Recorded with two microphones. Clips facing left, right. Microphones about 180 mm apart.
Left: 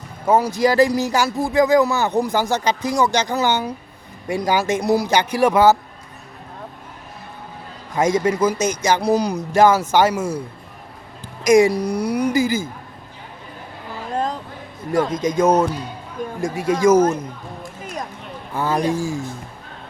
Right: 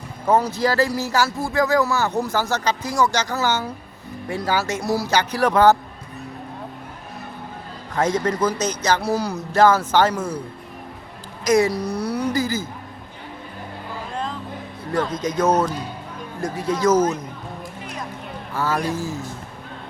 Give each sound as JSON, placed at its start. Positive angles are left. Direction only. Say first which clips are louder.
{"t": 0.3, "sound": "speech", "louder": "left 2 dB", "side_deg": 10}
{"t": 7.9, "sound": "speech", "louder": "left 3 dB", "side_deg": 10}
{"t": 11.4, "sound": "speech", "louder": "left 4 dB", "side_deg": 10}
{"t": 15.4, "sound": "speech", "louder": "left 2 dB", "side_deg": 10}
{"t": 18.5, "sound": "speech", "louder": "left 3 dB", "side_deg": 15}